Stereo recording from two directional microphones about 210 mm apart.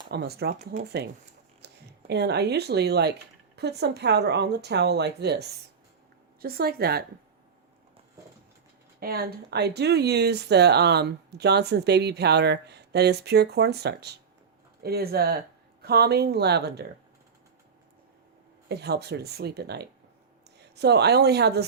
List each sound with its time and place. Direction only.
0.1 s speech: 50° right (ahead or behind)
1.6 s speech: 50° right (ahead or behind)
9.0 s speech: 45° right (ahead or behind)
18.7 s speech: 50° right (ahead or behind)